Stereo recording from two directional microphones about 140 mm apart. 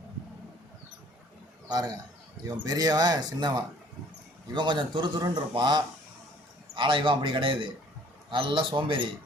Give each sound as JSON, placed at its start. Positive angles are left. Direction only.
{"t": 1.6, "sound": "a man's voice", "side_deg": -30}